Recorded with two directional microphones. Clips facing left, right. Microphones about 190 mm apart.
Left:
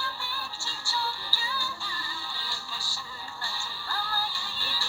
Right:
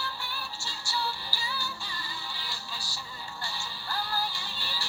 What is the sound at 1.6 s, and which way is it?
Music, 15° right (ahead or behind).